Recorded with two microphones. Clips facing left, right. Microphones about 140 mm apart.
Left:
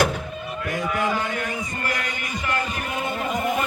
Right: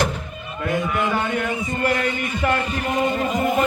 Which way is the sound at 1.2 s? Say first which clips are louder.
Right 4 dB; 25° right (ahead or behind).